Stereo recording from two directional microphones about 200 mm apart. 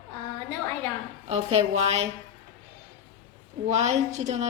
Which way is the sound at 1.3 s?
30° right (ahead or behind).